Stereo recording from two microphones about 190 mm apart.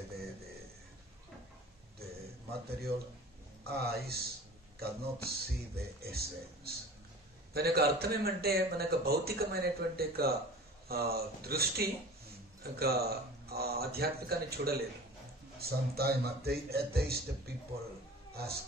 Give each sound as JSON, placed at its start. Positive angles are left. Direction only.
{"t": 3.6, "sound": "speech", "side_deg": -55}
{"t": 18.3, "sound": "speech", "side_deg": -55}